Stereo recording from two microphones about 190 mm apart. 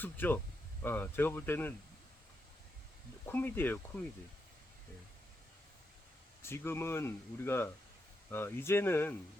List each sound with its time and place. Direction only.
0.0 s speech: 10° left (ahead or behind)
3.2 s speech: 10° left (ahead or behind)
6.4 s speech: 10° left (ahead or behind)